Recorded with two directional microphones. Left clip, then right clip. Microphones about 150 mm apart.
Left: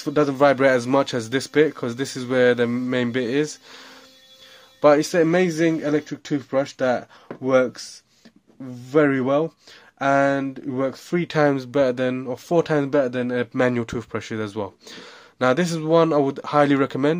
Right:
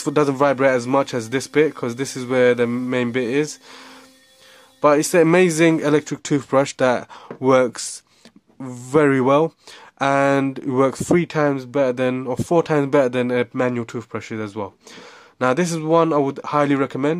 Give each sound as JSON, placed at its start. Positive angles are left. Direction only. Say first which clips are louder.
{"t": 0.0, "sound": "speech", "louder": "right 2 dB", "side_deg": -30}
{"t": 0.4, "sound": "speech", "louder": "left 3 dB", "side_deg": -15}
{"t": 5.1, "sound": "speech", "louder": "right 4 dB", "side_deg": -35}
{"t": 11.2, "sound": "speech", "louder": "even", "side_deg": -10}
{"t": 13.6, "sound": "speech", "louder": "left 1 dB", "side_deg": 0}